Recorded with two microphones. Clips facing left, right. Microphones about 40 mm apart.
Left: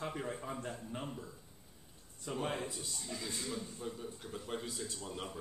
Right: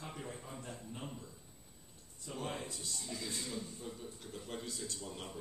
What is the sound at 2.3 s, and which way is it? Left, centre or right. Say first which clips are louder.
A man's voice: left 4 dB; centre.